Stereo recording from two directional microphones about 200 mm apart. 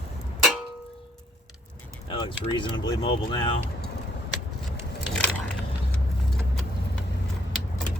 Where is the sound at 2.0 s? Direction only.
25° left (ahead or behind).